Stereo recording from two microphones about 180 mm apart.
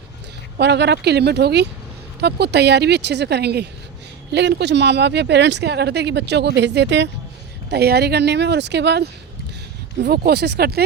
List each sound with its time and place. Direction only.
0.6 s speech: 70° right (ahead or behind)
7.7 s speech: 65° right (ahead or behind)